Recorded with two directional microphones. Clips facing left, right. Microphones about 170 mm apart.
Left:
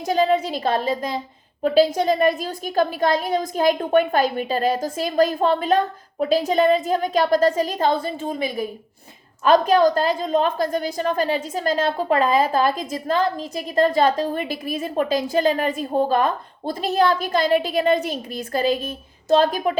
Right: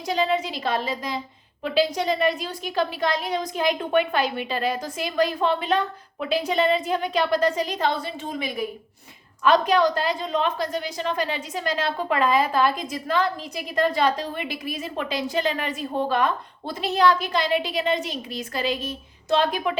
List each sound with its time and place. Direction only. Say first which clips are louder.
0.0 s a woman's voice: left 5 dB; 45° left (ahead or behind)